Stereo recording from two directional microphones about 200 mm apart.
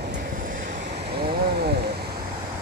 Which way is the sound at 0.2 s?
50° right (ahead or behind).